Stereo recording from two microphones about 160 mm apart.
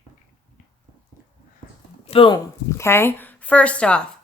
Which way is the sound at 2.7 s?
15° left (ahead or behind).